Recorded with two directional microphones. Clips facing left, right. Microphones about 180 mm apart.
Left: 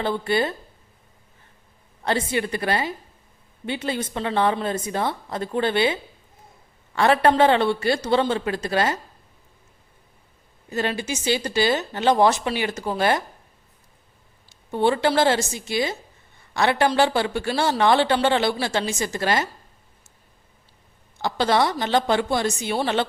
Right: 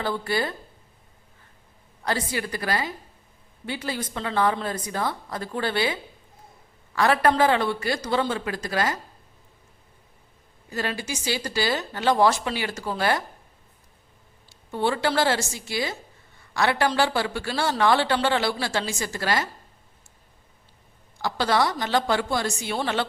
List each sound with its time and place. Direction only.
0.0 s speech: 25° left (ahead or behind)
2.0 s speech: 25° left (ahead or behind)
10.7 s speech: 25° left (ahead or behind)
14.5 s speech: 20° left (ahead or behind)
21.2 s speech: 20° left (ahead or behind)